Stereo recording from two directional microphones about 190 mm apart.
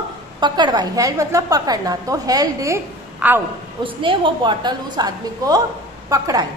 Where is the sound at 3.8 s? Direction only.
25° right (ahead or behind).